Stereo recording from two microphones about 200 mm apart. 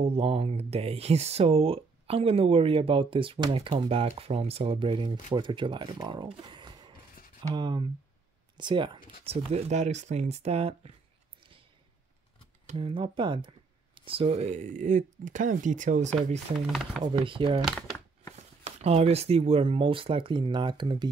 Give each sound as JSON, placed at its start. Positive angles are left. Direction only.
{"t": 0.0, "sound": "speech", "side_deg": -30}
{"t": 12.6, "sound": "speech", "side_deg": -25}
{"t": 17.0, "sound": "speech", "side_deg": -25}
{"t": 17.6, "sound": "crumpling", "side_deg": 10}
{"t": 18.3, "sound": "speech", "side_deg": -30}